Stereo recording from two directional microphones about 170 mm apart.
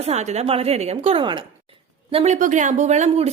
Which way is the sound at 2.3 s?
50° right (ahead or behind).